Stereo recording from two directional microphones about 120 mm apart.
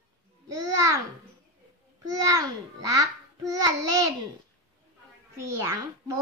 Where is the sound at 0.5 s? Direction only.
25° right (ahead or behind).